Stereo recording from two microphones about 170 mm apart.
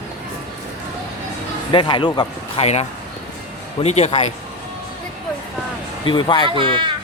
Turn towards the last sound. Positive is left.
turn(degrees=-30)  # may be behind; listen again after turning